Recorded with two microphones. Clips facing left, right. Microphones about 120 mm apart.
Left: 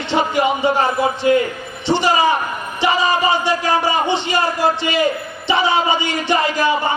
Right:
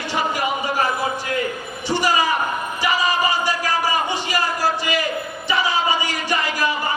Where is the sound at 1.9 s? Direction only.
25° left (ahead or behind).